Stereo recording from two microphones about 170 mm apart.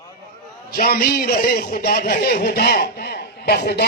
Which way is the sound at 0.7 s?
60° left (ahead or behind).